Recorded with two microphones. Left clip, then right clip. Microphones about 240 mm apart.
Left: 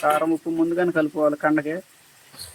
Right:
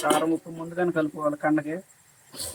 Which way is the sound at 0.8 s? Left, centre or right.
Centre.